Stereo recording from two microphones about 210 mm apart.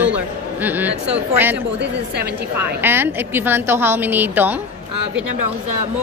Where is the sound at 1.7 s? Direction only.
55° right (ahead or behind).